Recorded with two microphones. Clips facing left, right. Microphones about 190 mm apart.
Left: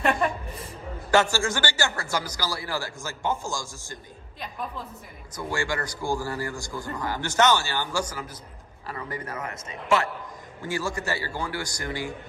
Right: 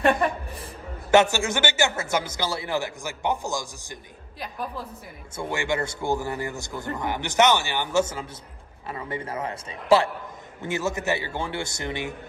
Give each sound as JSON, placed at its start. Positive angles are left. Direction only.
{"t": 1.1, "sound": "a man's voice", "side_deg": -20}
{"t": 5.3, "sound": "a man's voice", "side_deg": -25}